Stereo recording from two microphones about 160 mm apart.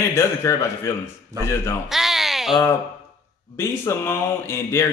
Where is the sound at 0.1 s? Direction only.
15° left (ahead or behind).